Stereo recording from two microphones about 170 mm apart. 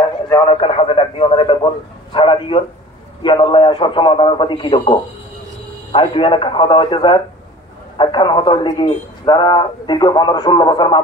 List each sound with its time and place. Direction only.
0.5 s radio: 35° left (ahead or behind)
2.1 s a sound: 30° left (ahead or behind)
3.2 s a man's voice: 25° left (ahead or behind)